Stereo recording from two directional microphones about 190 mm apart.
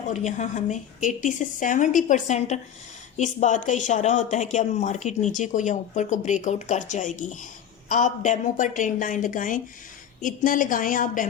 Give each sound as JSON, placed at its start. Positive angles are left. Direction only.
{"t": 0.1, "sound": "a woman's voice", "side_deg": 40}